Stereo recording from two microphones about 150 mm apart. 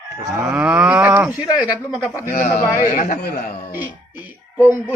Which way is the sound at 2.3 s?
65° left (ahead or behind).